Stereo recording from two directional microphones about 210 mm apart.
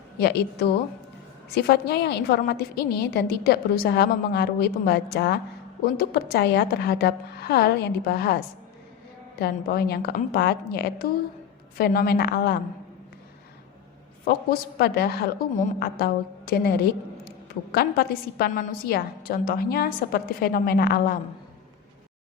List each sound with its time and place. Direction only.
0.2 s a woman's voice: 50° left (ahead or behind)
9.4 s a woman's voice: 50° left (ahead or behind)
14.3 s a woman's voice: 45° left (ahead or behind)